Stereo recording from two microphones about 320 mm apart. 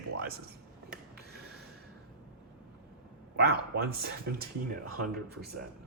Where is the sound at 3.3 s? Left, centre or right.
Right.